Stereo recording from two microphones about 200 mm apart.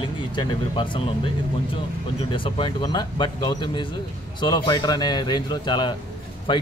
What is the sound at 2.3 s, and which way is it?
A man's voice, 25° left (ahead or behind).